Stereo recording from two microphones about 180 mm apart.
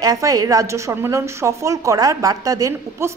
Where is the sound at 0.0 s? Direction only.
20° right (ahead or behind).